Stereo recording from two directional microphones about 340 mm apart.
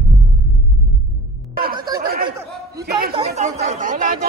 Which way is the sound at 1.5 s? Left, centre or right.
Right.